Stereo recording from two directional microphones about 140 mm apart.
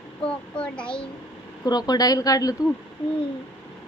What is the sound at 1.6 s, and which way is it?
Speech, 30° left (ahead or behind).